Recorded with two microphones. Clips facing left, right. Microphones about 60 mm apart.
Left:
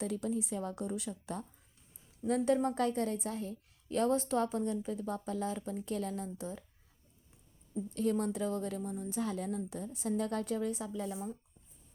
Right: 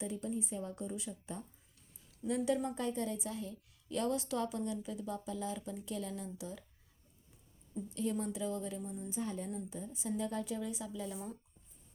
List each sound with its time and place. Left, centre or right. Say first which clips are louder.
0.0 s speech: left 4 dB; left
2.2 s a woman's voice: left 4 dB; left
2.7 s a woman's voice: left 5 dB; left
7.9 s a woman's voice: left 5 dB; left
9.6 s a woman's voice: left 4 dB; left